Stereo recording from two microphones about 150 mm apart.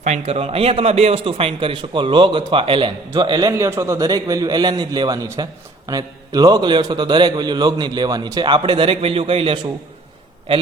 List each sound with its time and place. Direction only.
0.0 s a man's voice: 45° right (ahead or behind)